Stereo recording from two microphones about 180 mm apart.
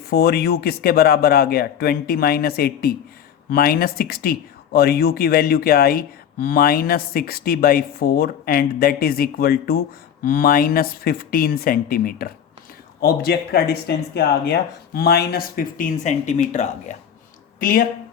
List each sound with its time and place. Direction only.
0.1 s speech: 60° left (ahead or behind)